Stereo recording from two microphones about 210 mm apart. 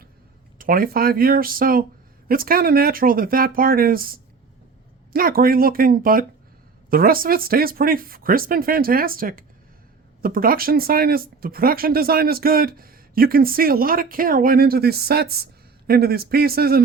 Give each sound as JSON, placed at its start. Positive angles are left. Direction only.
{"t": 0.6, "sound": "speech", "side_deg": -45}